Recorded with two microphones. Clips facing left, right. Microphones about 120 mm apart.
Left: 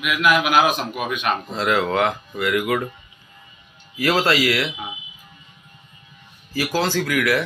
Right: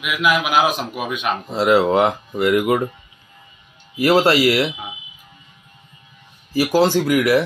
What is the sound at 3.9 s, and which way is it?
Speech, 25° right (ahead or behind).